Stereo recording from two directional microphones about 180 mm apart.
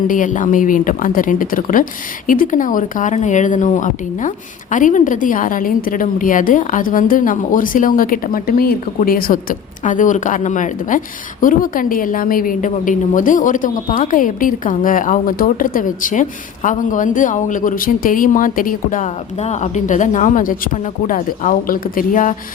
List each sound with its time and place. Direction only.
0.1 s a woman's voice: 45° left (ahead or behind)